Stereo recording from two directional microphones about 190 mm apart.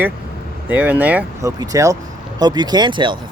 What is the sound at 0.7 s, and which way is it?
Speech, 10° right (ahead or behind).